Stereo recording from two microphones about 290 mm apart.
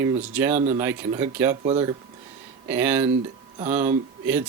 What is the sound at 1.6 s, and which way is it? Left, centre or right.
Speech, right.